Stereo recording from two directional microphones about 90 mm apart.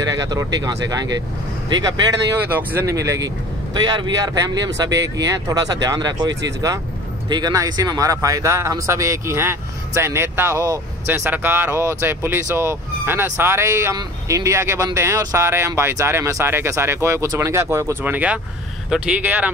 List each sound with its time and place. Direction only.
0.3 s speech: 50° right (ahead or behind)
2.5 s speech: 25° right (ahead or behind)
2.9 s speech: 35° right (ahead or behind)
3.7 s speech: 55° right (ahead or behind)
7.5 s speech: 40° right (ahead or behind)
11.1 s speech: 25° right (ahead or behind)
18.0 s speech: 15° right (ahead or behind)